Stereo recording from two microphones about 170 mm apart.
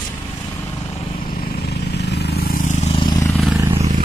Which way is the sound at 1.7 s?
80° left.